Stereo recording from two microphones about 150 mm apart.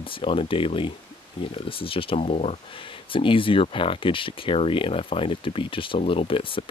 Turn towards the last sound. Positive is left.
turn(degrees=35)  # may be behind; listen again after turning